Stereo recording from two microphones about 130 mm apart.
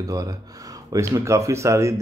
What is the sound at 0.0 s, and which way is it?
Speech, 25° right (ahead or behind).